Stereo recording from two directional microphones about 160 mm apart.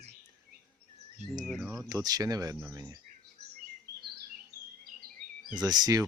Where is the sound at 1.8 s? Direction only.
25° right (ahead or behind).